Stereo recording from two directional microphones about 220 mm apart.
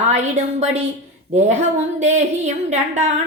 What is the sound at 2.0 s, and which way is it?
A woman's voice, 30° right (ahead or behind).